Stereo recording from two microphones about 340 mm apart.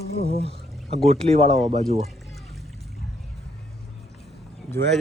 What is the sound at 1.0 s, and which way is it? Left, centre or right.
Speech, centre.